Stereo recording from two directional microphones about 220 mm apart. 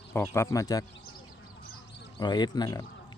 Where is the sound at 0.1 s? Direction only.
10° left (ahead or behind).